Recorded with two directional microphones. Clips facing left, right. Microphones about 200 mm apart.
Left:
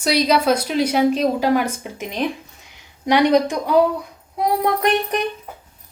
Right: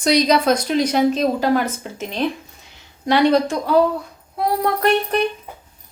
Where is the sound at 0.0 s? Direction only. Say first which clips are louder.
Right 2 dB; 5° left (ahead or behind).